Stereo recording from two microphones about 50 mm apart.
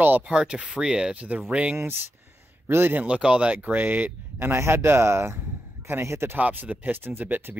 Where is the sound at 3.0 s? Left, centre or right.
Right.